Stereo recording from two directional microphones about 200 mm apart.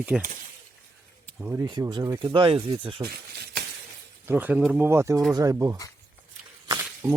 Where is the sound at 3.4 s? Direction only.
50° right (ahead or behind).